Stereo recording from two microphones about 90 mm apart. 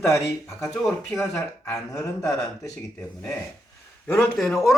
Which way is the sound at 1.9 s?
40° left (ahead or behind).